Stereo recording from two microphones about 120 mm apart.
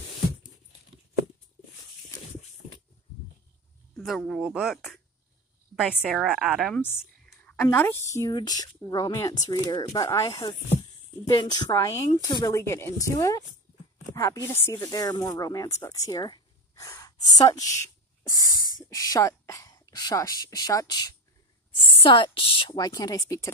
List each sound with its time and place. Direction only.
3.9 s speech: 5° left (ahead or behind)
4.4 s a woman's voice: 10° right (ahead or behind)
7.3 s a sound: 10° left (ahead or behind)
7.6 s a woman's voice: 15° left (ahead or behind); by 12.5 s 35° left (ahead or behind)
12.5 s speech: 20° left (ahead or behind)
14.9 s speech: 30° left (ahead or behind)
18.4 s snort: 30° right (ahead or behind)
18.9 s a woman's voice: 30° left (ahead or behind)
22.0 s a woman's voice: 45° left (ahead or behind); by 23.5 s 25° left (ahead or behind)